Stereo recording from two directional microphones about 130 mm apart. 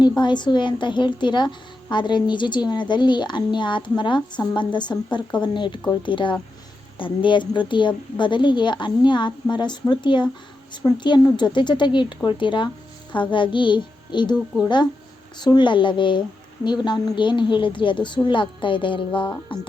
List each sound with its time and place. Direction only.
0.2 s a woman's voice: 35° left (ahead or behind)
15.4 s a woman's voice: 35° left (ahead or behind)